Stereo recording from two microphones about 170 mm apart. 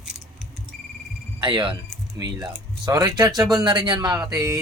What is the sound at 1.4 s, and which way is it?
Speech, 30° right (ahead or behind).